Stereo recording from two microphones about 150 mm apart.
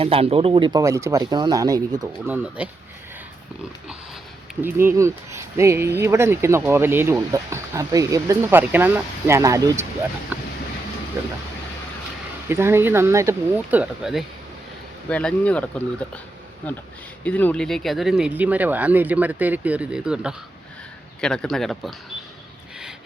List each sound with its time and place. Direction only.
0.0 s speech: 40° right (ahead or behind)
0.7 s speech: 20° right (ahead or behind)
2.2 s speech: 10° right (ahead or behind)
4.6 s speech: 15° right (ahead or behind)
10.3 s speech: 10° right (ahead or behind)
12.5 s speech: 15° right (ahead or behind); by 15.7 s 10° left (ahead or behind)
17.2 s speech: 10° left (ahead or behind); by 20.3 s 5° right (ahead or behind)
21.2 s speech: 5° left (ahead or behind)